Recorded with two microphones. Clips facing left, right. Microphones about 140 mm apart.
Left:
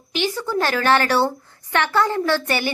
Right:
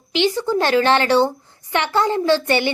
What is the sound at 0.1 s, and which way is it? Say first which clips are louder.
Child singing: right 5 dB; 25° right (ahead or behind).